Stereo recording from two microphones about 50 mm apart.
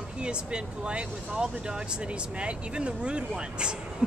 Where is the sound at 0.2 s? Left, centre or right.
Centre.